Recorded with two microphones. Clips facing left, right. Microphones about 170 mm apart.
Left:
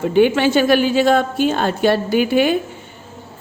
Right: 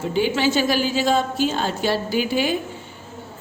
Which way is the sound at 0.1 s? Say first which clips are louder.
Left 6 dB; 60° left (ahead or behind).